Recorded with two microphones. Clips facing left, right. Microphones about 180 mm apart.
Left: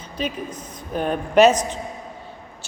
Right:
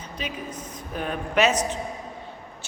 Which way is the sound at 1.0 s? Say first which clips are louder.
Left 6 dB; 35° left (ahead or behind).